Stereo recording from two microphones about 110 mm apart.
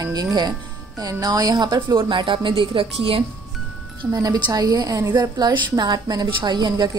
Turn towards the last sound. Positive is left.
turn(degrees=-40)  # may be behind; listen again after turning